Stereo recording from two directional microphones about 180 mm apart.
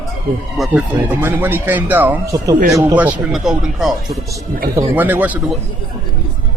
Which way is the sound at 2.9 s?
5° right (ahead or behind).